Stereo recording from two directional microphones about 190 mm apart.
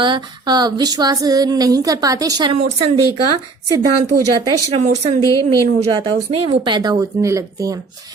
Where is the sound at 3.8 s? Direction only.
20° right (ahead or behind).